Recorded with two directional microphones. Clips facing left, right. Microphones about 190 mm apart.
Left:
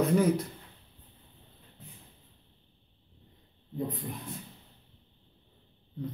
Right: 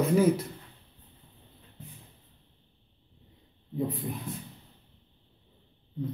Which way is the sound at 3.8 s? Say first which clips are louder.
Right 3 dB; 5° right (ahead or behind).